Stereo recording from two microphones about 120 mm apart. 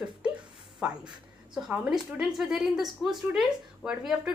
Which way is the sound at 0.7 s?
5° right (ahead or behind).